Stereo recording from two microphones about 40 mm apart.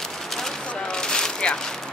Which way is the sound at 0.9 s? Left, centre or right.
Centre.